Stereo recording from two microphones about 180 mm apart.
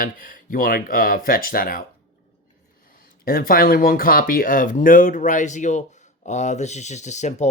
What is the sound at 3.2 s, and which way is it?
Speech, 55° left (ahead or behind).